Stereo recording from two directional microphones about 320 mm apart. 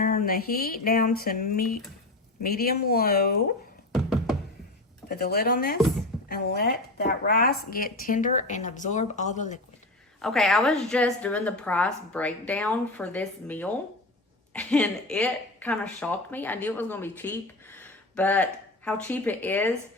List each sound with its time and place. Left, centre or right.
0.0 s speech: left
5.0 s speech: left
10.2 s a woman's voice: centre